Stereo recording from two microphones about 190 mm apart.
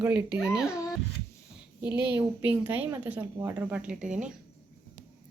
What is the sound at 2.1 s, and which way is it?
A woman's voice, 10° right (ahead or behind).